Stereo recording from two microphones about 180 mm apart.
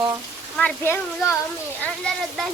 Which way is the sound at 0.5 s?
10° left (ahead or behind).